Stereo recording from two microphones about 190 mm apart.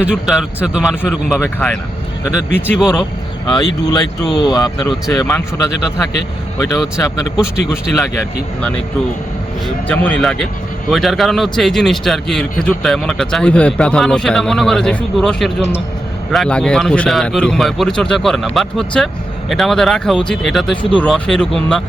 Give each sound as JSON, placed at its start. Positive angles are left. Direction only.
{"t": 0.0, "sound": "a man's voice", "side_deg": -5}
{"t": 1.4, "sound": "a man's voice", "side_deg": 10}
{"t": 4.4, "sound": "a man's voice", "side_deg": 20}
{"t": 9.6, "sound": "a man's voice", "side_deg": 5}